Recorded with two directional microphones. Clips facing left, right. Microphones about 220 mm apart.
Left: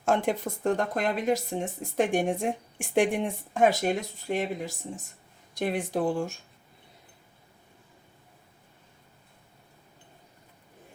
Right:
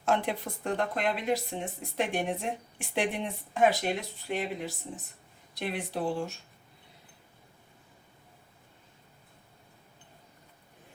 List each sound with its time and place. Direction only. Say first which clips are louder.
0.0 s a woman's voice: left 3 dB; 45° left (ahead or behind)